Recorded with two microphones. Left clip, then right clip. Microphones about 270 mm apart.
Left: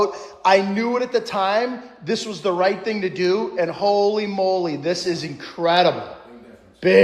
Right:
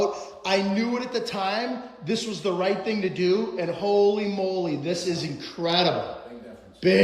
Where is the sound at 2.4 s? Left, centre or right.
Centre.